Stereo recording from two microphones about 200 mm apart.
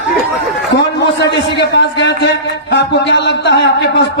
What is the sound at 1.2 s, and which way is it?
A man's voice, 60° left (ahead or behind).